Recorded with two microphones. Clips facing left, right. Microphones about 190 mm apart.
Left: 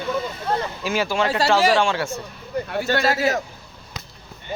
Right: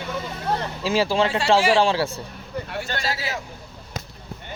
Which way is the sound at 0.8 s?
30° right (ahead or behind).